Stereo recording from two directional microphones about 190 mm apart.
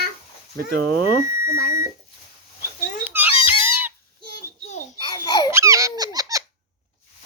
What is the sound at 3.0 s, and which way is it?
Music, 10° right (ahead or behind).